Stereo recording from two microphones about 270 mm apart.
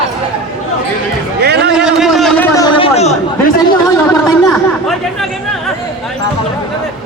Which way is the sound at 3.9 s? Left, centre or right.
Centre.